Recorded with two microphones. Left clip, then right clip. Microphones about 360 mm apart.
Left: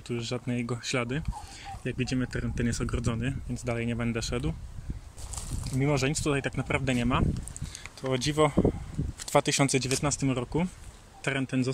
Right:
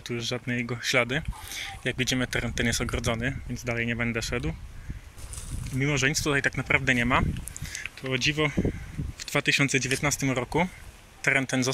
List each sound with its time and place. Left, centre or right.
0.0 s speech: centre
5.6 s speech: centre
7.7 s speech: centre